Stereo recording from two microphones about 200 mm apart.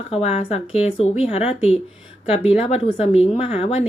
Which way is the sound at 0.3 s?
30° left (ahead or behind).